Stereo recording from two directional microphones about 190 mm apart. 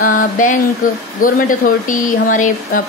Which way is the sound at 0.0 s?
45° left (ahead or behind).